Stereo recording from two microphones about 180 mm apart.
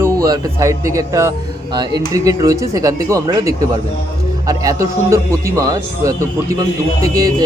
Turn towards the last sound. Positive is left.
turn(degrees=-20)  # may be behind; listen again after turning